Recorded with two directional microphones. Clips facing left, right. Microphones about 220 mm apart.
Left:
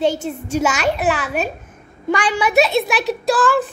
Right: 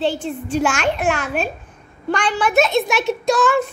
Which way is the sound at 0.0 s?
45° left (ahead or behind).